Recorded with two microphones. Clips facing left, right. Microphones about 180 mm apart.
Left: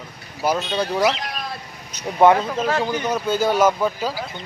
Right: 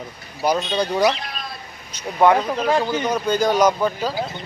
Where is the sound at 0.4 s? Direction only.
5° left (ahead or behind).